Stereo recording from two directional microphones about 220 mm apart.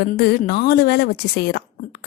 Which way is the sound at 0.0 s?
45° left (ahead or behind).